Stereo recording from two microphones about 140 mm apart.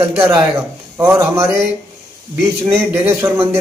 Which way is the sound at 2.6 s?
15° right (ahead or behind).